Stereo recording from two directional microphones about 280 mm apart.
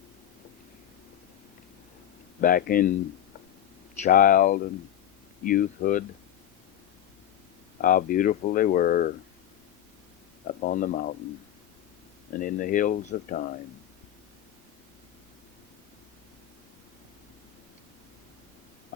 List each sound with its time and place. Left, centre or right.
2.4 s speech: left
4.0 s speech: left
7.8 s speech: left
10.4 s speech: left
12.4 s speech: left